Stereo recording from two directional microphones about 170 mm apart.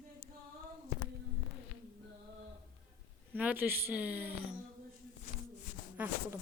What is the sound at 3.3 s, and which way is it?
Speech, 10° right (ahead or behind).